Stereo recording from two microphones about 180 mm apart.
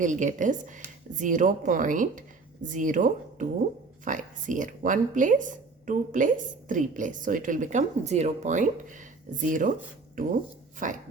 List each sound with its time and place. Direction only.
0.0 s speech: 45° right (ahead or behind)
10.8 s speech: 45° right (ahead or behind)